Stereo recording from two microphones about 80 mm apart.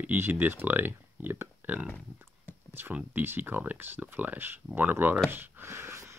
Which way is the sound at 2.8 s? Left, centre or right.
Right.